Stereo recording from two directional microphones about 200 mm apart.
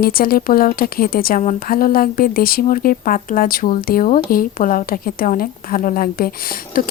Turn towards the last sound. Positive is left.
turn(degrees=45)  # may be behind; listen again after turning